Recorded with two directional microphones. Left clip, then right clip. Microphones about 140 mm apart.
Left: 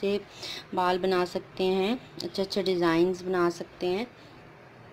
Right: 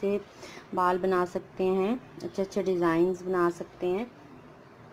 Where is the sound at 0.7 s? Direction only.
5° left (ahead or behind).